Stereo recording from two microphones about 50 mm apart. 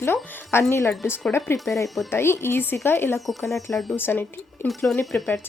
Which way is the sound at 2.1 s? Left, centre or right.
Left.